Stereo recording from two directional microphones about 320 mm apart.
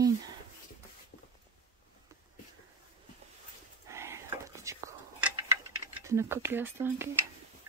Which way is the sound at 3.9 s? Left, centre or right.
Centre.